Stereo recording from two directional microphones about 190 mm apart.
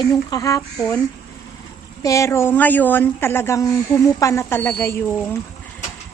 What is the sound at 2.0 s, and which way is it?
A woman's voice, 15° left (ahead or behind).